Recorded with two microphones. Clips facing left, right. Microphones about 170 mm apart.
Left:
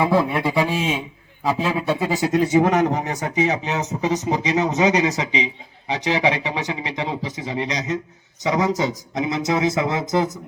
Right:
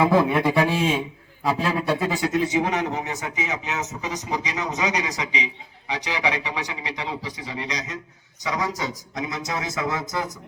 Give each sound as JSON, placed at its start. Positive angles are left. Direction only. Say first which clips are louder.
{"t": 0.5, "sound": "speech", "louder": "even", "side_deg": 15}
{"t": 1.5, "sound": "a man's voice", "louder": "left 2 dB", "side_deg": 5}
{"t": 2.3, "sound": "speech", "louder": "left 9 dB", "side_deg": 45}